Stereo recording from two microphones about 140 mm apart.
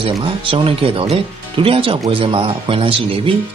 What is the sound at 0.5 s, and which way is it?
Speech, 40° right (ahead or behind).